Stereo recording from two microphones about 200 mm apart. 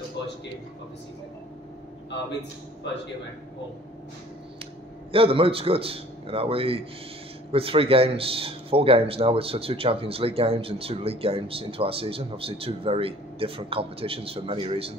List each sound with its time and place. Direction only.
2.8 s speech: 60° left (ahead or behind)
5.1 s speech: 30° right (ahead or behind)